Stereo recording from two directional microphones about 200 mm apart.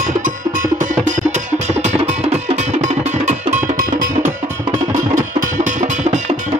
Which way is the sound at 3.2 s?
40° right (ahead or behind).